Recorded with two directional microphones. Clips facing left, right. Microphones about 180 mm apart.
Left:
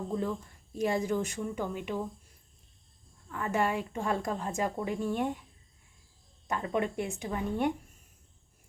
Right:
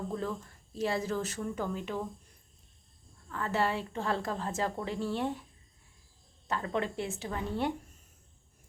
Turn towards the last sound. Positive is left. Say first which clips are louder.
# left 2 dB
turn(degrees=15)  # may be behind; listen again after turning